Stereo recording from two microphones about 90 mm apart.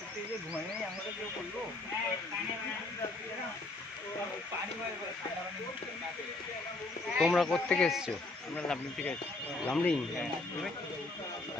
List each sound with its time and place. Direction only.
7.2 s speech: centre (ahead or behind)